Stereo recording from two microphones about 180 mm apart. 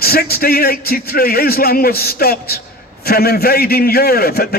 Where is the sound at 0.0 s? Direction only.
55° left (ahead or behind).